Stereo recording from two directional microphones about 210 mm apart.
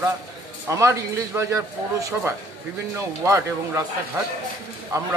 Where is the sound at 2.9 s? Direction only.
15° right (ahead or behind).